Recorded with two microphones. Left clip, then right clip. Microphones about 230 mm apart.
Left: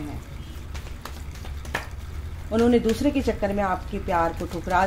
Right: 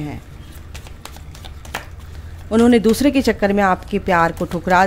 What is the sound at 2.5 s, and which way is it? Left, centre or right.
Speech, right.